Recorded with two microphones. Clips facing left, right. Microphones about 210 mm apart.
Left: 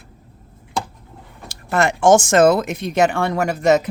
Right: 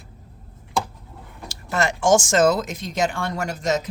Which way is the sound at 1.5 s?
55° left (ahead or behind).